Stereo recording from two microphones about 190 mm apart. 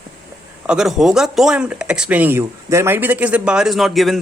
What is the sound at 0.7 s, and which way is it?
Speech, 5° right (ahead or behind).